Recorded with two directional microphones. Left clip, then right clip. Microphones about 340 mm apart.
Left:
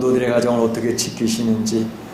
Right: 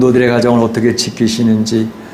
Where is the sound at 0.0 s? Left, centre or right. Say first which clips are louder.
Right 6 dB; right.